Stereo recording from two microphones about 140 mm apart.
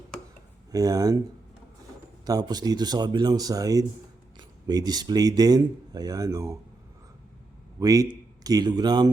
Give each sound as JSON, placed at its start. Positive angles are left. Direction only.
{"t": 0.1, "sound": "a sound", "side_deg": 5}
{"t": 0.7, "sound": "speech", "side_deg": -25}
{"t": 2.2, "sound": "speech", "side_deg": -30}
{"t": 7.8, "sound": "a man's voice", "side_deg": -25}